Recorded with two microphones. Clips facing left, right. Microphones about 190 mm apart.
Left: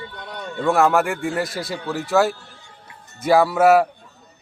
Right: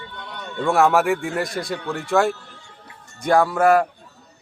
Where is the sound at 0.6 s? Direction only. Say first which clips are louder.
Even; centre (ahead or behind).